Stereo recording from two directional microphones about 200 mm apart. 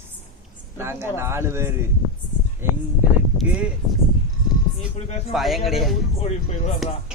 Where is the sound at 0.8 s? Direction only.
15° right (ahead or behind).